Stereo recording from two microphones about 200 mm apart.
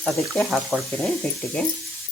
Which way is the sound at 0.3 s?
Centre (ahead or behind).